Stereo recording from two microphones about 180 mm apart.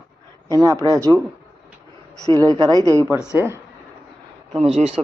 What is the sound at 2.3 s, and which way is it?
Speech, 20° right (ahead or behind).